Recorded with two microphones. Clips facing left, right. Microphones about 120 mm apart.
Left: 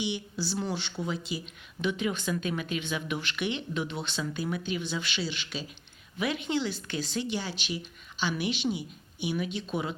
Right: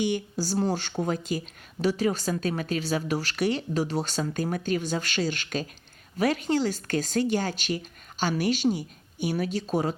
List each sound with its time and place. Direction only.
0.0 s speech: 45° right (ahead or behind)